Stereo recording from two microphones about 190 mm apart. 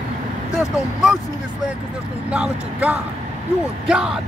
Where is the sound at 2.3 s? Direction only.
5° right (ahead or behind).